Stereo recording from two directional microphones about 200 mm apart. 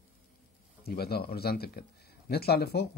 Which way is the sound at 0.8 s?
50° left (ahead or behind).